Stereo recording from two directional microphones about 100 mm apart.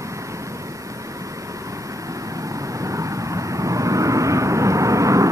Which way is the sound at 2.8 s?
30° right (ahead or behind).